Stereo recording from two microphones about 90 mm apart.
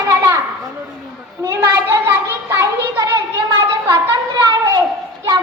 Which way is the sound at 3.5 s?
45° right (ahead or behind).